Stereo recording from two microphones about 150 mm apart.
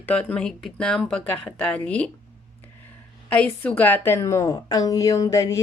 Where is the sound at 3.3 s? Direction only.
5° left (ahead or behind).